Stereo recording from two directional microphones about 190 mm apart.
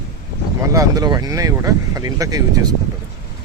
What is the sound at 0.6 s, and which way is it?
Speech, 15° right (ahead or behind).